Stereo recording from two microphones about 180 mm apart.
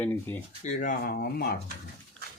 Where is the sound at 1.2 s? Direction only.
60° left (ahead or behind).